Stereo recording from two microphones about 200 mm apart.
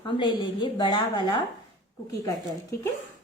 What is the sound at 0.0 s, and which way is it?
A woman's voice, 25° left (ahead or behind).